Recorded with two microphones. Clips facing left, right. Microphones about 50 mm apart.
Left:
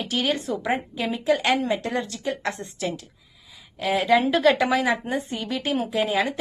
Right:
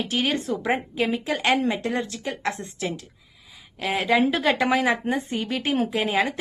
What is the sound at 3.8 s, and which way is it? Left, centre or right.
A woman's voice, right.